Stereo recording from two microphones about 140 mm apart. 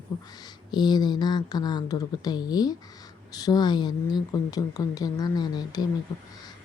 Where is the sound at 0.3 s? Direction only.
30° left (ahead or behind).